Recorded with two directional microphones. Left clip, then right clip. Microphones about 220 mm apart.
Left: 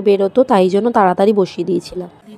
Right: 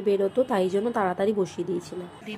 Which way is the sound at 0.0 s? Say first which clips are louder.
Left 11 dB; 35° left (ahead or behind).